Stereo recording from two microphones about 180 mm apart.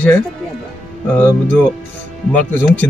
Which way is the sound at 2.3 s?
10° left (ahead or behind).